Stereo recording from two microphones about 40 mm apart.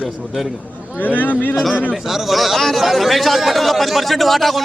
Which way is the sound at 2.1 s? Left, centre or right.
Centre.